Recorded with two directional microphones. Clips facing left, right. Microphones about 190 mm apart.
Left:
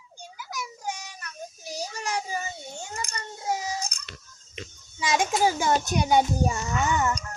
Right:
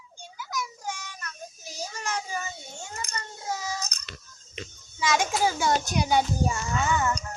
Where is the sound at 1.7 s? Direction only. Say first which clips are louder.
Left 2 dB; 15° left (ahead or behind).